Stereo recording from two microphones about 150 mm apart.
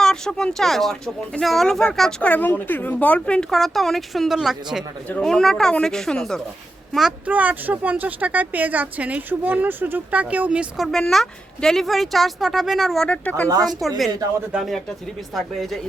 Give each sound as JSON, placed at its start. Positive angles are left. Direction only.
{"t": 0.0, "sound": "speech", "side_deg": 5}
{"t": 6.9, "sound": "speech", "side_deg": -5}
{"t": 10.9, "sound": "speech", "side_deg": 5}
{"t": 14.1, "sound": "speech", "side_deg": -25}
{"t": 14.5, "sound": "speech", "side_deg": 0}